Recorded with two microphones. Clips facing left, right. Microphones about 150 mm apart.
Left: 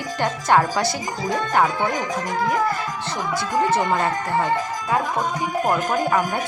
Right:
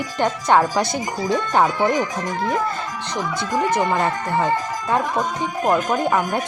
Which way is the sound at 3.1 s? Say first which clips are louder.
Right 1 dB; 20° right (ahead or behind).